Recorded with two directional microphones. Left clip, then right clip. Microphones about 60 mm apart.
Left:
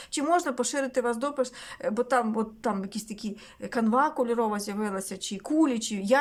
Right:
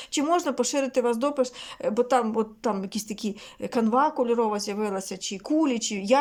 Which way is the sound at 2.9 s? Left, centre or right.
Right.